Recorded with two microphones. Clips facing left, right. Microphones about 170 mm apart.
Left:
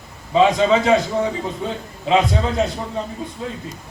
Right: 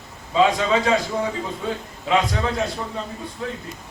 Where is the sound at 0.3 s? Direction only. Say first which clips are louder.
Left 4 dB; 20° left (ahead or behind).